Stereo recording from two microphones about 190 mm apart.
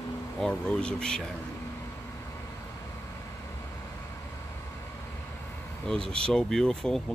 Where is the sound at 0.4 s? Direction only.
5° left (ahead or behind).